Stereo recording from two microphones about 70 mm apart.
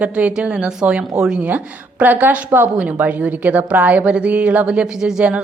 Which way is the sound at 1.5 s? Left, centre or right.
Right.